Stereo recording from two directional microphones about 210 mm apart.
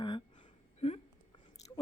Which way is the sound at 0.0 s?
25° left (ahead or behind).